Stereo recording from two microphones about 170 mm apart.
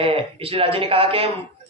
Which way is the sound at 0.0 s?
35° right (ahead or behind).